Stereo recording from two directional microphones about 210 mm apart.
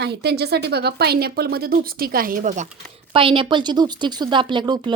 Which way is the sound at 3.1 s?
25° right (ahead or behind).